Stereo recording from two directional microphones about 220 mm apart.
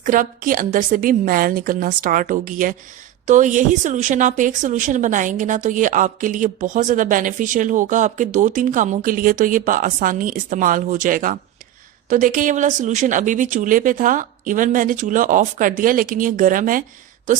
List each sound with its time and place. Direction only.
0.0 s a woman's voice: 35° right (ahead or behind)